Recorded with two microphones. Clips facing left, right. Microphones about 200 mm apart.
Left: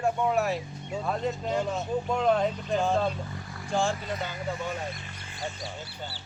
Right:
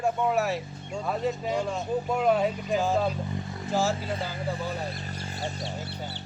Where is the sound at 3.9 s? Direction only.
30° right (ahead or behind).